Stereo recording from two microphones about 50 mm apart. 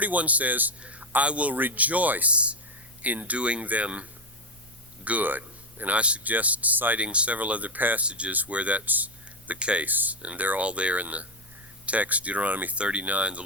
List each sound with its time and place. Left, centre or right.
0.0 s speech: right
7.0 s speech: right
8.0 s speech: right
9.5 s speech: right
9.8 s speech: right
12.7 s speech: right